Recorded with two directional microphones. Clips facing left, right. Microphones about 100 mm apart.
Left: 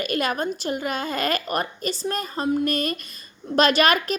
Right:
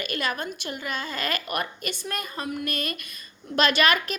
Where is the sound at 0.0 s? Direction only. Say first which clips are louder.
Left 5 dB; 45° left (ahead or behind).